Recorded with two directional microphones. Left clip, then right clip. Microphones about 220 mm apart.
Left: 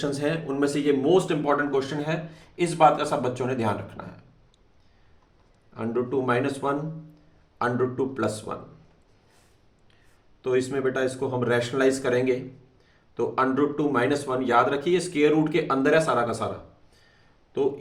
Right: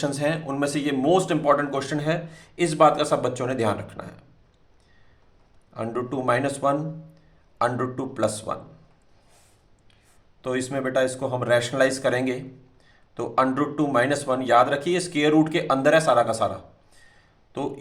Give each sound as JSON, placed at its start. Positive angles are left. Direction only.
{"t": 0.0, "sound": "speech", "side_deg": -40}
{"t": 5.7, "sound": "speech", "side_deg": -40}
{"t": 10.4, "sound": "speech", "side_deg": -40}